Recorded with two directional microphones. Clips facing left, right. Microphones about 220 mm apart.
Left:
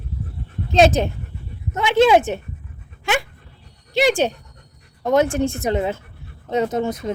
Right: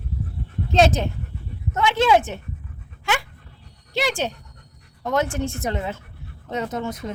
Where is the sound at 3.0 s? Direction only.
15° left (ahead or behind).